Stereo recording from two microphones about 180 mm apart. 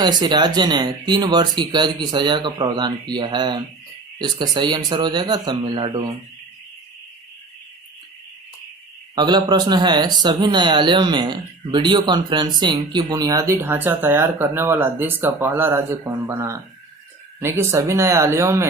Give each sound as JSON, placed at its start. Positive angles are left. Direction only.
{"t": 0.0, "sound": "speech", "side_deg": -25}
{"t": 9.1, "sound": "speech", "side_deg": -25}